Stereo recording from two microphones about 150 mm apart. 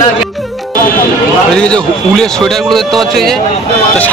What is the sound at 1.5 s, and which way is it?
A man's voice, 5° left (ahead or behind).